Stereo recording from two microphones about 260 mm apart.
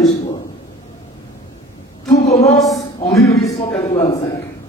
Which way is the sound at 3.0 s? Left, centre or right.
Centre.